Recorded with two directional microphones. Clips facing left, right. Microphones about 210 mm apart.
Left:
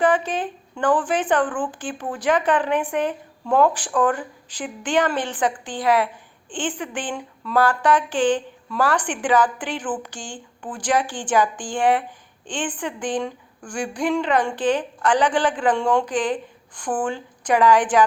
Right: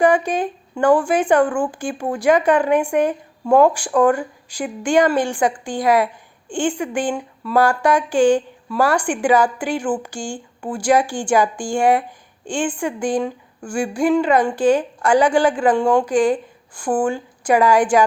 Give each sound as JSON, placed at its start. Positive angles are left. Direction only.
{"t": 0.0, "sound": "a woman's voice", "side_deg": -10}